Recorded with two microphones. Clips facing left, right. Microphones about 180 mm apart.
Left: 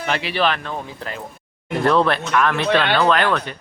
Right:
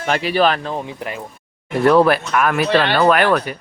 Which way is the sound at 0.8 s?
15° right (ahead or behind).